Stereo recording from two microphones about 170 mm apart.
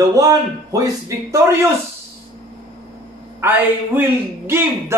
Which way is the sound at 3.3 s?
10° right (ahead or behind).